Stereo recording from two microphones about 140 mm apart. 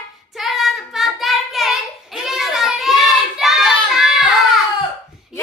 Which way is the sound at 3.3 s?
Centre (ahead or behind).